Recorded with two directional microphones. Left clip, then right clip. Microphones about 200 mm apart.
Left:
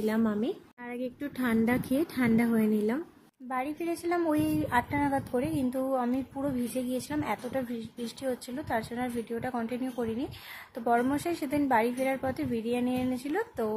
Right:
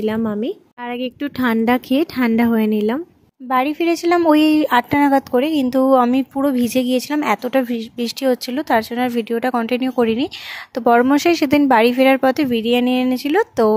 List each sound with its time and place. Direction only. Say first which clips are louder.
0.0 s speech: right 9 dB; 35° right (ahead or behind)
0.8 s speech: right 12 dB; 45° right (ahead or behind)